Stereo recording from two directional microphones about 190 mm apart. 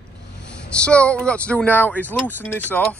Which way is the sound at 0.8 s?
5° left (ahead or behind).